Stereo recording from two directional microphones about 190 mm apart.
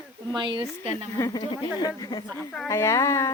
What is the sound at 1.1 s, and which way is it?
Speech, 20° left (ahead or behind).